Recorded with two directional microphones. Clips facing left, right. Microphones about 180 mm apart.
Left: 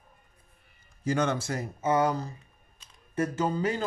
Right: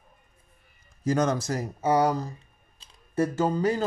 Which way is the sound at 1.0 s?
40° right (ahead or behind).